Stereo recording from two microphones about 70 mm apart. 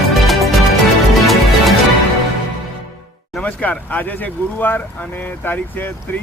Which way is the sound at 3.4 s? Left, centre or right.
Centre.